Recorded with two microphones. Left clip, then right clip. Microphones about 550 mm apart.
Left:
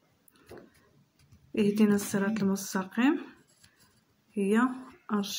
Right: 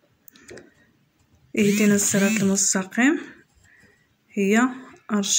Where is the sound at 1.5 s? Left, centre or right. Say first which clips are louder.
Right 7 dB; left.